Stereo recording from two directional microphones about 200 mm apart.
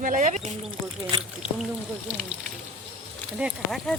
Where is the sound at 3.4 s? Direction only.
Centre (ahead or behind).